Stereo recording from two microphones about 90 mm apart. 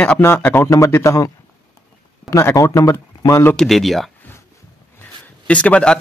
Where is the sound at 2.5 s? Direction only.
35° left (ahead or behind).